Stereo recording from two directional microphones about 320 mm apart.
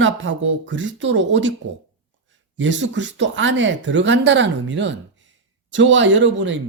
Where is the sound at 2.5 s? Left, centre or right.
Right.